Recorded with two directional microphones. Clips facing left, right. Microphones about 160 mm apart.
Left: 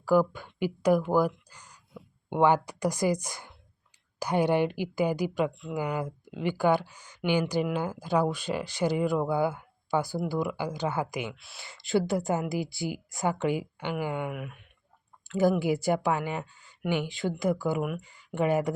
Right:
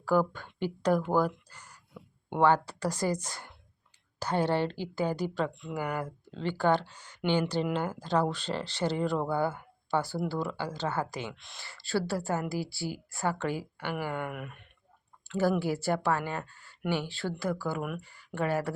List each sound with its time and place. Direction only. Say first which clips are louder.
0.0 s speech: left 3 dB; 10° left (ahead or behind)
1.5 s a sound: even; 15° left (ahead or behind)
2.3 s speech: left 1 dB; 15° left (ahead or behind)
11.6 s speech: left 4 dB; 20° left (ahead or behind)
14.3 s speech: left 3 dB; centre (ahead or behind)
15.4 s speech: left 3 dB; 15° left (ahead or behind)